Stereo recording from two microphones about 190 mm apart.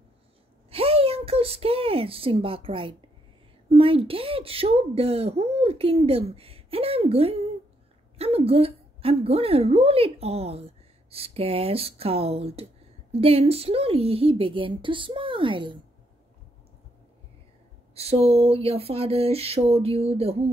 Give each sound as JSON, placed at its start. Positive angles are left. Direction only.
{"t": 0.7, "sound": "a woman's voice", "side_deg": -30}
{"t": 17.9, "sound": "a woman's voice", "side_deg": -30}